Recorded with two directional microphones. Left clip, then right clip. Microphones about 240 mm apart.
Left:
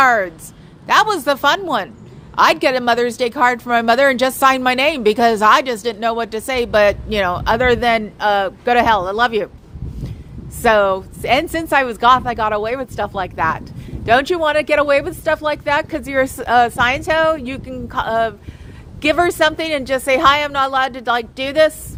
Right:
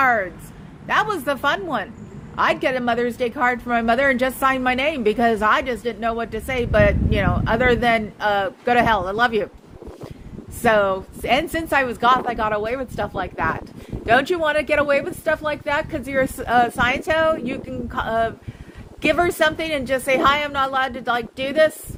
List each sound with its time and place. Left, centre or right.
0.0 s a sound: left
0.9 s a woman's voice: left
10.6 s a woman's voice: left